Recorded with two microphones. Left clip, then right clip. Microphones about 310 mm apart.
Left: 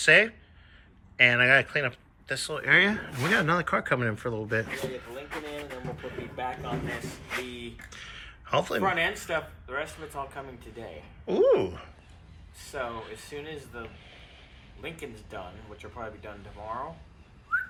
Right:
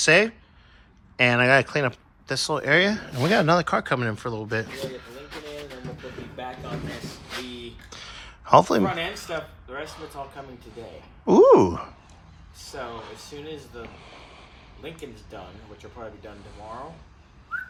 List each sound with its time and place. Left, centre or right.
0.0 s speech: centre
2.6 s speech: centre
11.3 s a sound: centre
14.0 s boat: right
15.8 s speech: centre